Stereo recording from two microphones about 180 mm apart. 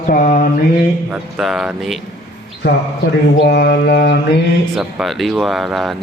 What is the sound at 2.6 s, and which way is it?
Mantra, 65° left (ahead or behind).